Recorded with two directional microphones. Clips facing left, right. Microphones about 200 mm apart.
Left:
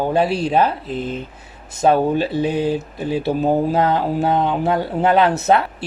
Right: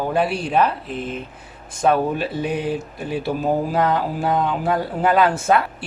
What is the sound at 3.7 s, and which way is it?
Speech, 30° left (ahead or behind).